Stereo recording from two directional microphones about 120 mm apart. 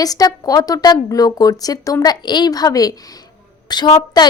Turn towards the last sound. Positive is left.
turn(degrees=35)  # may be behind; listen again after turning